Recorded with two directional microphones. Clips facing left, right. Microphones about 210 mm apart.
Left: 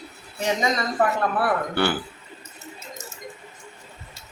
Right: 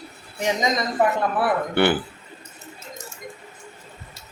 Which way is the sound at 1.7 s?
20° right (ahead or behind).